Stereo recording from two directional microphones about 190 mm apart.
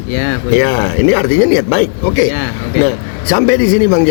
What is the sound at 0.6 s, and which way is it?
Speech, 15° left (ahead or behind).